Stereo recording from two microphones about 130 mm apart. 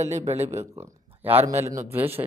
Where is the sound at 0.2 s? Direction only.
55° right (ahead or behind).